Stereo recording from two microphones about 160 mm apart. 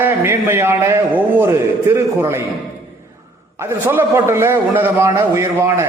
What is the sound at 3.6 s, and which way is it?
A man's voice, 15° right (ahead or behind).